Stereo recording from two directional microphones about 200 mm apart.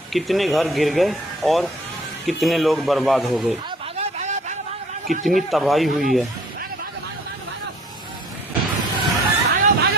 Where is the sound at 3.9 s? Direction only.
35° right (ahead or behind).